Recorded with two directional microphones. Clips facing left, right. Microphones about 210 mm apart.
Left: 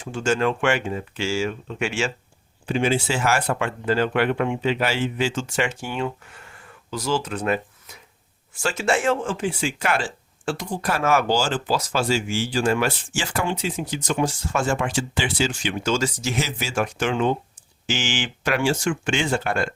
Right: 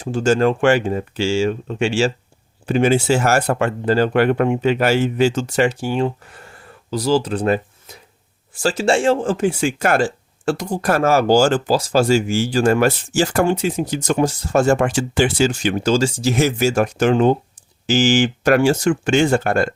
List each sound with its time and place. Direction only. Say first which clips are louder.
0.0 s speech: right 6 dB; 40° right (ahead or behind)
2.6 s speech: right 7 dB; 45° right (ahead or behind)
11.3 s speech: right 8 dB; 45° right (ahead or behind)
11.8 s speech: right 8 dB; 35° right (ahead or behind)
12.0 s speech: right 7 dB; 45° right (ahead or behind)
16.3 s speech: right 9 dB; 50° right (ahead or behind)